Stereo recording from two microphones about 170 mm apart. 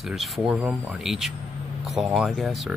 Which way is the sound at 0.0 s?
Centre (ahead or behind).